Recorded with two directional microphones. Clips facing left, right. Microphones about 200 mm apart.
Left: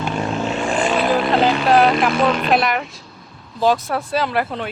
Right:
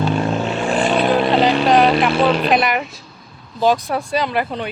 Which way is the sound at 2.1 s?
30° right (ahead or behind).